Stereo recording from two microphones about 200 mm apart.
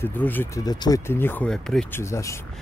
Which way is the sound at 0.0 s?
10° left (ahead or behind).